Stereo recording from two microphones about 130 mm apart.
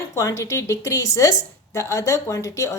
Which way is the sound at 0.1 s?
25° left (ahead or behind).